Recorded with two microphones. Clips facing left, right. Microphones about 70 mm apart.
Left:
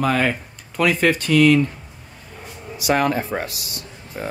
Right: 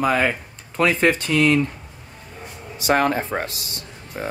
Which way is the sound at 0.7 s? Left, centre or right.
Right.